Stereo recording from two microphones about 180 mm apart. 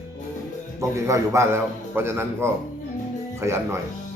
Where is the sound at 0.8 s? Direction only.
15° right (ahead or behind).